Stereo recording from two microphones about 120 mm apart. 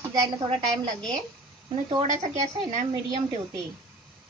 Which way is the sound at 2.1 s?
85° right.